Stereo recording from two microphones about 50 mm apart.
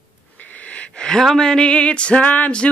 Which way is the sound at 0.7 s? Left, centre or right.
Left.